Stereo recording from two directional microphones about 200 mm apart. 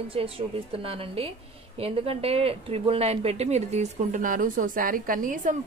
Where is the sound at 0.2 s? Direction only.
30° right (ahead or behind).